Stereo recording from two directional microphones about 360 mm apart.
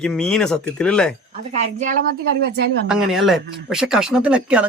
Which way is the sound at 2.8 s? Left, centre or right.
Centre.